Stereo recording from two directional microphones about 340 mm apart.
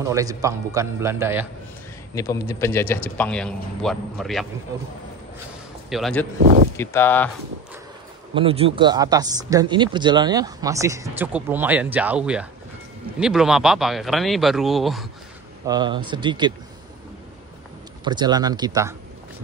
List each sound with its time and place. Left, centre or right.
0.0 s speech: centre
2.1 s speech: centre
5.9 s speech: centre
6.4 s speech: right
6.8 s speech: centre
8.4 s speech: centre
15.6 s speech: centre
18.0 s speech: centre